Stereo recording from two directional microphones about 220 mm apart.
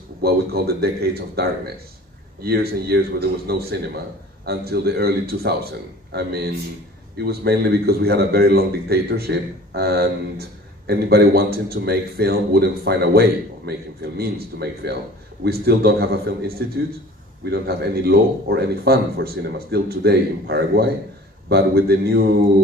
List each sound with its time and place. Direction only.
0.2 s a man's voice: 45° right (ahead or behind)